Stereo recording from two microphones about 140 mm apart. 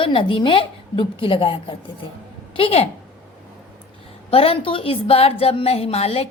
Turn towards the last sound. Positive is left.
turn(degrees=50)  # may be behind; listen again after turning